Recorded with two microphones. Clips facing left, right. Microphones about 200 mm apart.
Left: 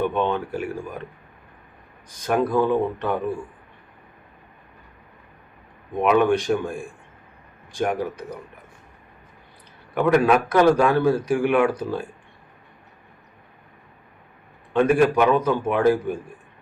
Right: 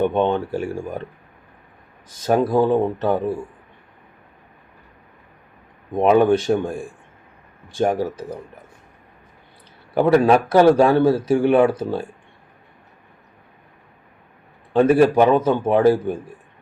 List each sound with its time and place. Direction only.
0.0 s speech: 25° right (ahead or behind)
2.5 s a man's voice: 35° right (ahead or behind)
6.0 s speech: 30° right (ahead or behind)
7.8 s speech: 30° right (ahead or behind)
9.9 s a man's voice: 30° right (ahead or behind)
14.7 s a man's voice: 35° right (ahead or behind)